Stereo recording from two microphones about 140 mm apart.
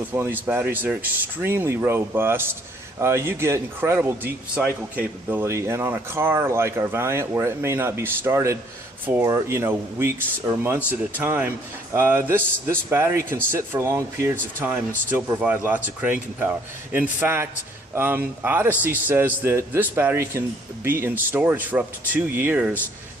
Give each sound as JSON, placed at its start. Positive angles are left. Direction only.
{"t": 0.1, "sound": "speech", "side_deg": -15}